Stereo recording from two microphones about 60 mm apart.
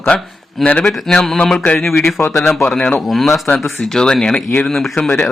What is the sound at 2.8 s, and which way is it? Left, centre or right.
Speech, centre.